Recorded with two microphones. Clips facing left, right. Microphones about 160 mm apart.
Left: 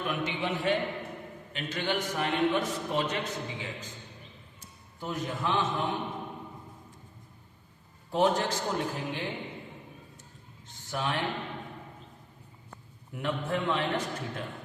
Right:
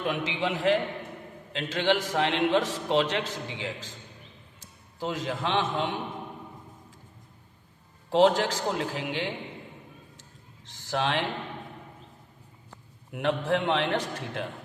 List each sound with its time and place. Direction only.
0.0 s a man's voice: 90° right
4.9 s a man's voice: 90° right
8.1 s a man's voice: 90° right
10.7 s a man's voice: 90° right
13.1 s a man's voice: 75° right (ahead or behind)